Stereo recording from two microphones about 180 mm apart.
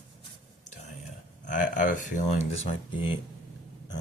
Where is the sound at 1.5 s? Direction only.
45° left (ahead or behind).